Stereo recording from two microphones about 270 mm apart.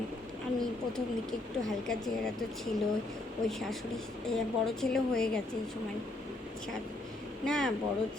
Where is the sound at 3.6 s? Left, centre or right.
Centre.